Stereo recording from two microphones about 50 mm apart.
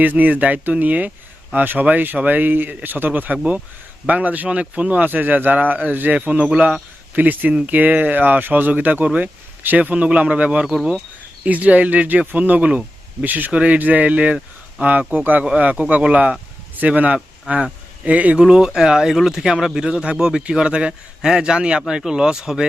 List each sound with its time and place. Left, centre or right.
0.0 s speech: right
4.4 s speech: right
4.9 s speech: right
7.2 s speech: right
13.5 s speech: right
13.7 s speech: right
18.3 s speech: centre